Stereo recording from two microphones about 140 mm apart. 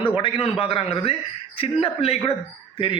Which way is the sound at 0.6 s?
45° left (ahead or behind).